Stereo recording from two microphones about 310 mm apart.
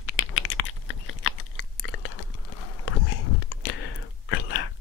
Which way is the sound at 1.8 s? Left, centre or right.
Left.